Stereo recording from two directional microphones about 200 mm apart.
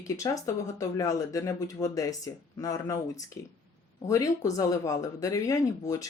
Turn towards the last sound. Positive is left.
turn(degrees=15)  # may be behind; listen again after turning